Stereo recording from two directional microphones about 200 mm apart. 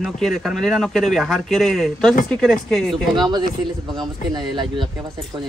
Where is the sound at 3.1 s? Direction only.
20° right (ahead or behind).